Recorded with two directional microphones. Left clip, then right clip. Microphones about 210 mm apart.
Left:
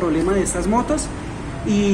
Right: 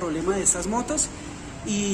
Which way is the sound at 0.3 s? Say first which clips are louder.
Left 5 dB; 10° right (ahead or behind).